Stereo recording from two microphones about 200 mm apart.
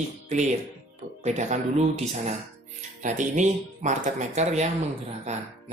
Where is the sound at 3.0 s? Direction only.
40° right (ahead or behind).